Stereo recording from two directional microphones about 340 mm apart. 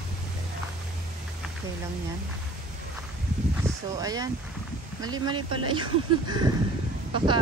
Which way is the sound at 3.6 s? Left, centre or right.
Centre.